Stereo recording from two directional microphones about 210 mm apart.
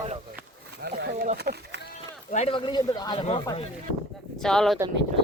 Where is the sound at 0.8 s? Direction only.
50° right (ahead or behind).